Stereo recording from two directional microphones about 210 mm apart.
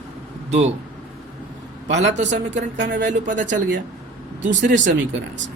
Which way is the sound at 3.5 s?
60° right (ahead or behind).